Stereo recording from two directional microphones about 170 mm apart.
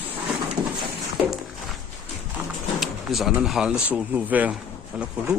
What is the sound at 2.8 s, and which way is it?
Speech, centre (ahead or behind).